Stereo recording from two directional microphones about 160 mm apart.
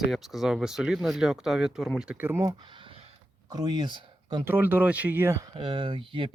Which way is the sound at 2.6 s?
30° right (ahead or behind).